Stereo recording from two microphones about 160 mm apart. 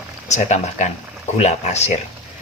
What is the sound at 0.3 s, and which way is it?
Speech, 45° left (ahead or behind).